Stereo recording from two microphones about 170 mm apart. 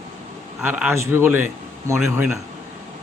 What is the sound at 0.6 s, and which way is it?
Speech, 10° right (ahead or behind).